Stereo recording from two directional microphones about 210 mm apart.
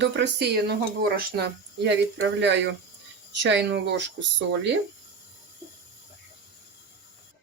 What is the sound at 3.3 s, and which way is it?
Speech, 60° right (ahead or behind).